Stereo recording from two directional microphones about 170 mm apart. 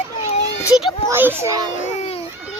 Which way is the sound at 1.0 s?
10° right (ahead or behind).